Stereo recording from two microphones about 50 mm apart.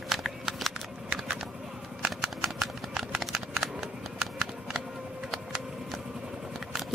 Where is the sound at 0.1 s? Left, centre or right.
Centre.